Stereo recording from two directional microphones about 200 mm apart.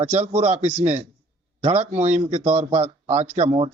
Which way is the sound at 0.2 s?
30° right (ahead or behind).